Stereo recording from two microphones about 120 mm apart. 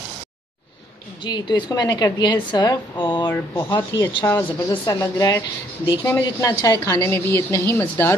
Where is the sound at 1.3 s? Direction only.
35° left (ahead or behind).